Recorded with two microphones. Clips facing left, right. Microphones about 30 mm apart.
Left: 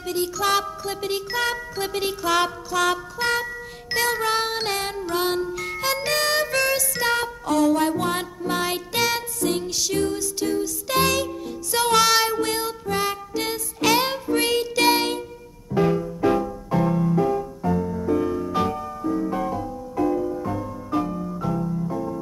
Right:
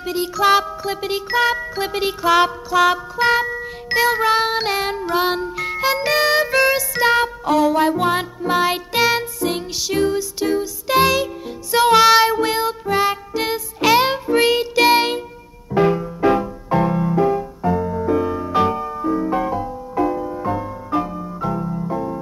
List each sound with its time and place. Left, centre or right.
0.0 s music: centre
15.7 s music: right
20.9 s music: centre
21.6 s piano: right